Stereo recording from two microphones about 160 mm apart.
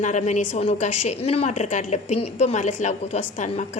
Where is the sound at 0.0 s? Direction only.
45° left (ahead or behind).